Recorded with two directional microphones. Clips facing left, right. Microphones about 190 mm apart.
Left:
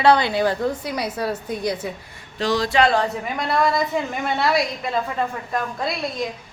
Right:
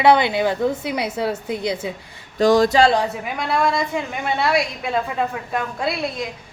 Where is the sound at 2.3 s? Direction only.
45° right (ahead or behind).